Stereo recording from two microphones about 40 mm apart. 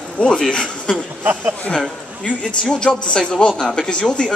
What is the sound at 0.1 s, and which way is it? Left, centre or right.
Speech, left.